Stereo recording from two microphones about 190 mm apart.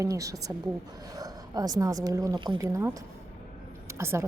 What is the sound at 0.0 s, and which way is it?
A woman's voice, 15° right (ahead or behind).